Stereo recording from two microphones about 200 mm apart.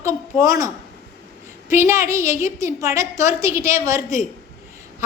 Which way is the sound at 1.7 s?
15° right (ahead or behind).